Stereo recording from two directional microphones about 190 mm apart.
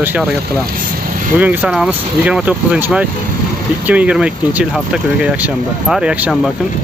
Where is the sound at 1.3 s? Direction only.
5° right (ahead or behind).